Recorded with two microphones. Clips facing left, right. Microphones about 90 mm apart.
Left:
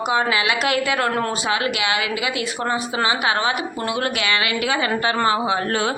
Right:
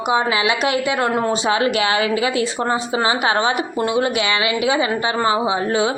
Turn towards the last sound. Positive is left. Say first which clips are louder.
# right 3 dB
turn(degrees=-20)  # may be behind; listen again after turning